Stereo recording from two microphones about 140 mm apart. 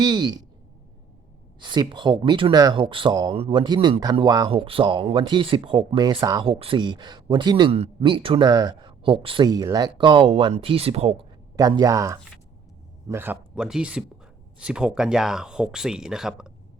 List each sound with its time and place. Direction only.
0.0 s speech: 30° right (ahead or behind)
1.6 s speech: 30° right (ahead or behind)
4.4 s speech: 40° right (ahead or behind)
8.9 s speech: 40° right (ahead or behind)
9.5 s speech: 25° right (ahead or behind); by 11.3 s 45° right (ahead or behind)
11.5 s speech: 25° right (ahead or behind); by 16.5 s 5° right (ahead or behind)